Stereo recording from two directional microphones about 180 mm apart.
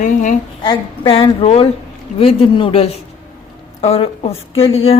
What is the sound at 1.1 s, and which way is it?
A woman's voice, 30° left (ahead or behind).